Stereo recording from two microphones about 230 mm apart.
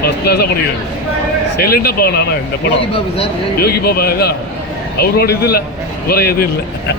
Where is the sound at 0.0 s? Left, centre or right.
Left.